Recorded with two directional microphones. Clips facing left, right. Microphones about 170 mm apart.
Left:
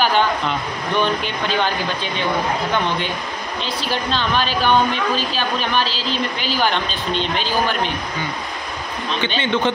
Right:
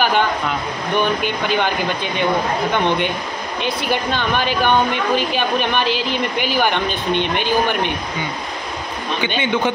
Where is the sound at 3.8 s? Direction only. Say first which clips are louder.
Even; 15° right (ahead or behind).